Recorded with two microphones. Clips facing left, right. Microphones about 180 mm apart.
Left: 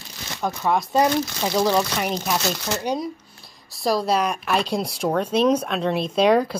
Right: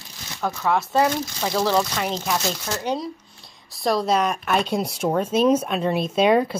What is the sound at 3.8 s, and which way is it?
Speech, centre (ahead or behind).